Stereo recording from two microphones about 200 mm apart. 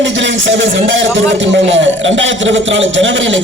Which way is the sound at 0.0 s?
65° right (ahead or behind).